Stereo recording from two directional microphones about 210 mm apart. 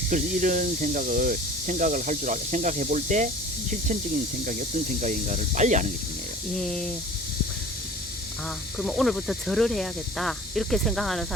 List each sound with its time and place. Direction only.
0.1 s speech: 40° right (ahead or behind)
4.9 s speech: 35° right (ahead or behind)
6.6 s speech: 5° left (ahead or behind)
8.8 s speech: centre (ahead or behind)